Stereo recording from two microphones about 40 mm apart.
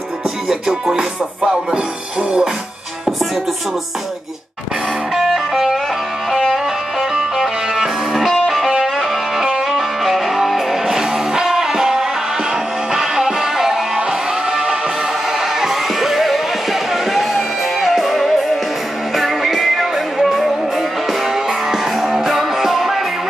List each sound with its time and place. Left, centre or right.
0.5 s music: centre
5.1 s music: centre